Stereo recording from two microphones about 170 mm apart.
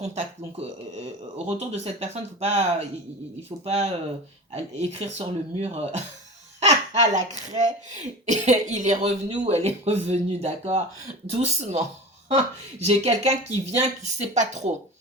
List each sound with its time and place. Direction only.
0.0 s speech: 40° right (ahead or behind)